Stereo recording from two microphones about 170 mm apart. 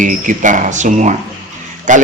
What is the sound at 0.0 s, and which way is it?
A man's voice, 50° right (ahead or behind).